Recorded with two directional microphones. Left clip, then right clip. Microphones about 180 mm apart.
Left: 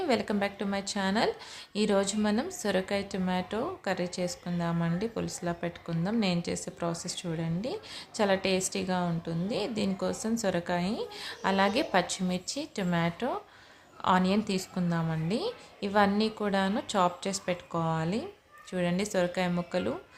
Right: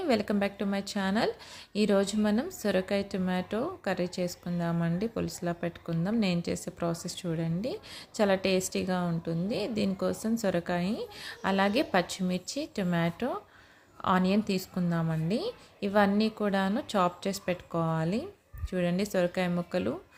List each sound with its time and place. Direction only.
0.0 s a woman's voice: 20° right (ahead or behind)